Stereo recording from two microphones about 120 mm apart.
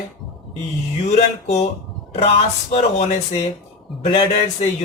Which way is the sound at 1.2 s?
60° left (ahead or behind).